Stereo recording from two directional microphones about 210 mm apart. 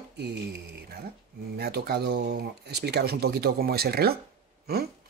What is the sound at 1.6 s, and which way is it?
Speech, 50° right (ahead or behind).